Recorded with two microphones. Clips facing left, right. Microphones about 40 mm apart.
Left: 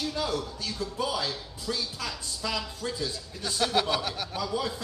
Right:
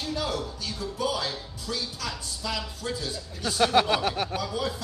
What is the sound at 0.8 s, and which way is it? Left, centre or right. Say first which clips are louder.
Speech: even; centre.